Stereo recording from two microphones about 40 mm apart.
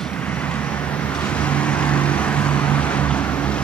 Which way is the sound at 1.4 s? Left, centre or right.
Left.